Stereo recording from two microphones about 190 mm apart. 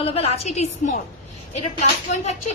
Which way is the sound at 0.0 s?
30° left (ahead or behind).